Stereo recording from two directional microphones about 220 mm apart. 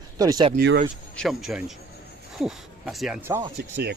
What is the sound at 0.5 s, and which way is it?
Speech, 45° right (ahead or behind).